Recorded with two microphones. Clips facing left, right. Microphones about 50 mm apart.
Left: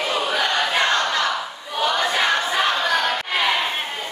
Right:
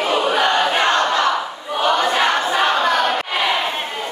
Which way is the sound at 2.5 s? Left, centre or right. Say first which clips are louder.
Right 4 dB; right.